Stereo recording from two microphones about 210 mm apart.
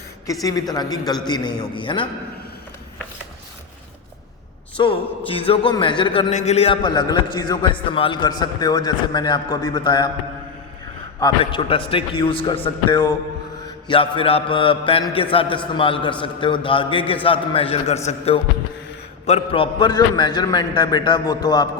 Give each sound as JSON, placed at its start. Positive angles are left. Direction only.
{"t": 0.4, "sound": "a man's voice", "side_deg": 20}
{"t": 4.8, "sound": "a man's voice", "side_deg": 25}
{"t": 11.2, "sound": "a man's voice", "side_deg": 25}